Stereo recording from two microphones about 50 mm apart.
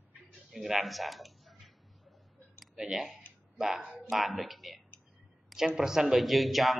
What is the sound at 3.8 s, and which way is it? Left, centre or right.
Speech, right.